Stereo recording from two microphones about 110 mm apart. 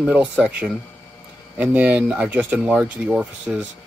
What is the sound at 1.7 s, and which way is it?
Speech, 15° right (ahead or behind).